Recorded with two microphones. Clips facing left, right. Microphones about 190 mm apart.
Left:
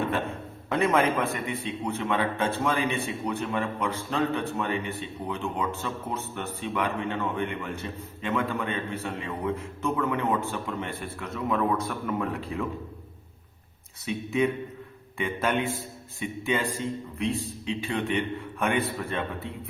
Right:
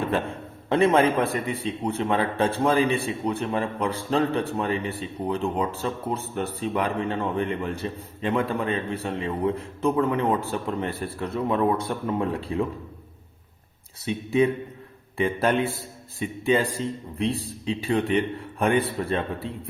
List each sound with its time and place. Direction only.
0.7 s a man's voice: 30° right (ahead or behind)
14.0 s a man's voice: 35° right (ahead or behind)